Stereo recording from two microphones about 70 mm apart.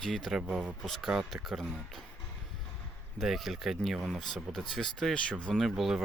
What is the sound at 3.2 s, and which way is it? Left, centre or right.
Speech, centre.